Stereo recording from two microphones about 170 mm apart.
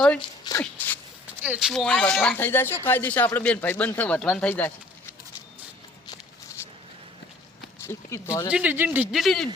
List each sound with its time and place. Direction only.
0.2 s a sound: 25° left (ahead or behind)
1.4 s speech: 5° right (ahead or behind); by 5.1 s 10° left (ahead or behind)
7.9 s speech: 15° left (ahead or behind)
8.4 s speech: 10° right (ahead or behind)